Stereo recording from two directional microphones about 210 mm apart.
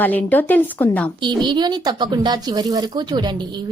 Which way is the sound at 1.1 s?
20° right (ahead or behind).